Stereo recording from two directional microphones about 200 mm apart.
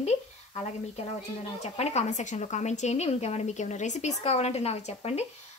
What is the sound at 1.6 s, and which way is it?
A woman's voice, 35° left (ahead or behind).